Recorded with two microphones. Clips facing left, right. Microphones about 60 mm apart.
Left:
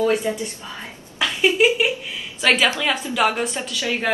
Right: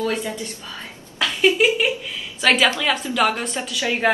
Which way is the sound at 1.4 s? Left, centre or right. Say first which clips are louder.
Even; centre.